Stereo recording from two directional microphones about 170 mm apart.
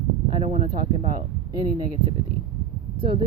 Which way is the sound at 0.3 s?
35° right (ahead or behind).